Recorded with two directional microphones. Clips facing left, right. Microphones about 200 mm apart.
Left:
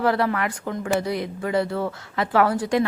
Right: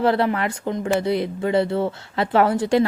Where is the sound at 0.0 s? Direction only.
25° right (ahead or behind).